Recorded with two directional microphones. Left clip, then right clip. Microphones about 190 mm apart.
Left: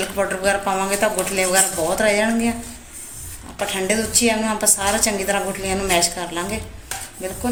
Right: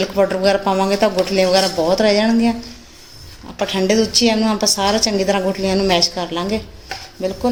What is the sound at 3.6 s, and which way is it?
Speech, 45° right (ahead or behind).